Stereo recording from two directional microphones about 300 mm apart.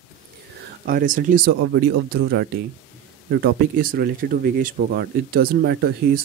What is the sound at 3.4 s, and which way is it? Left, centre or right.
Speech, right.